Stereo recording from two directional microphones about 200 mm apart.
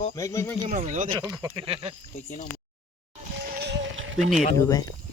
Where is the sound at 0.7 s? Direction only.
40° right (ahead or behind).